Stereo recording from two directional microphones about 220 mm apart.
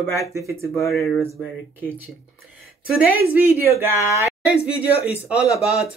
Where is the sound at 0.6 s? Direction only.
Centre (ahead or behind).